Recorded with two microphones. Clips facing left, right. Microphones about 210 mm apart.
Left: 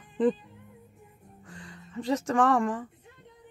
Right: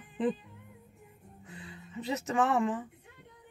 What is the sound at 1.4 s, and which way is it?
Music, 5° right (ahead or behind).